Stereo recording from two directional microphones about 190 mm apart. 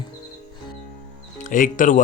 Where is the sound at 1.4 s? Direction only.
45° left (ahead or behind).